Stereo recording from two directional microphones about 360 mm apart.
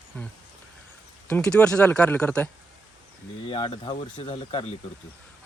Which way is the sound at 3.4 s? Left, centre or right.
Centre.